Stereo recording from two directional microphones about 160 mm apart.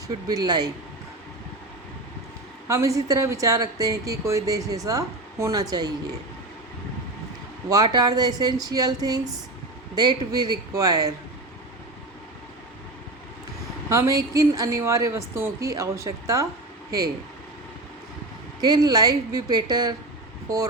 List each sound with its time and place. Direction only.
0.3 s speech: 25° right (ahead or behind)
2.6 s speech: 20° right (ahead or behind)
7.7 s speech: 25° right (ahead or behind)
13.9 s speech: 20° right (ahead or behind)
18.6 s speech: 25° right (ahead or behind)